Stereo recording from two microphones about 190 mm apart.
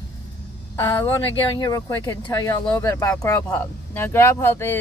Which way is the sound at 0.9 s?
20° left (ahead or behind).